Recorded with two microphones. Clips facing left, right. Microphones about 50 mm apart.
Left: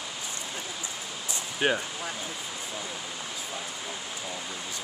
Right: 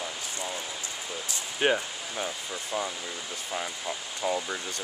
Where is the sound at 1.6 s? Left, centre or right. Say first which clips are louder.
Right 1 dB; centre.